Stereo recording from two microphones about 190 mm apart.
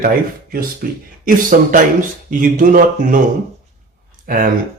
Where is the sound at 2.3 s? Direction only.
45° right (ahead or behind).